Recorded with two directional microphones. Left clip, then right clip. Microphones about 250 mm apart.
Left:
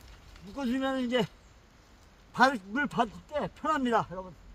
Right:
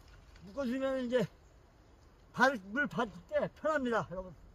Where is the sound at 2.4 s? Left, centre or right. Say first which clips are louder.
Left 4 dB; centre.